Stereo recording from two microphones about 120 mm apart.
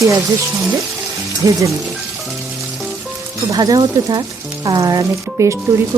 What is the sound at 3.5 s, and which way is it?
Speech, 35° right (ahead or behind).